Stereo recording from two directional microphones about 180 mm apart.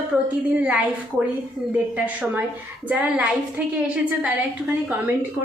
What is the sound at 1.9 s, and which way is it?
A woman's voice, 10° right (ahead or behind).